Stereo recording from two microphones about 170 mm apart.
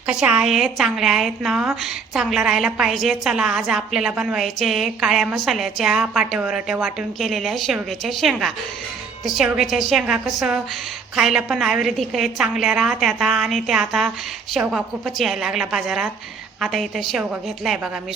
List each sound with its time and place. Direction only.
0.1 s a woman's voice: 5° right (ahead or behind)